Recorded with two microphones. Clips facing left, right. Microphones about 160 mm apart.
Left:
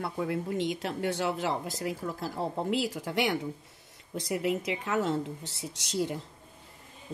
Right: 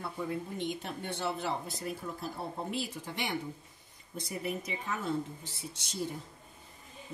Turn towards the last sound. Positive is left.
turn(degrees=85)